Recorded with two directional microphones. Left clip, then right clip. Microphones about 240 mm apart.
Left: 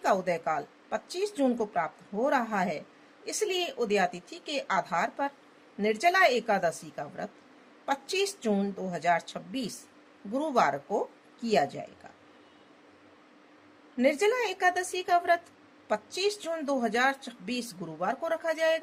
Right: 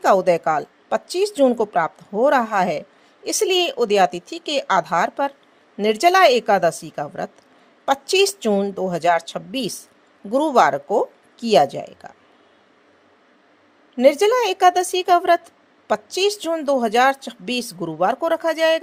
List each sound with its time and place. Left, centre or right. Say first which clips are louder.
0.0 s a woman's voice: right 12 dB; right
13.9 s speech: right 11 dB; right